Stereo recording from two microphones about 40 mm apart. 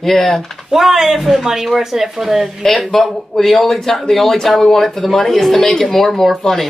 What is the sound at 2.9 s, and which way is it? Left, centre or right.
Speech, centre.